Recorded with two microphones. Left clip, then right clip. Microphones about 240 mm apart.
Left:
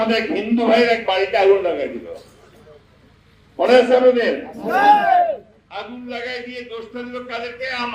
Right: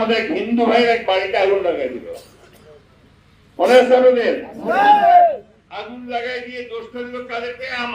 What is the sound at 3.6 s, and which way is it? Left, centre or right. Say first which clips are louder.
Speech: right 1 dB; left.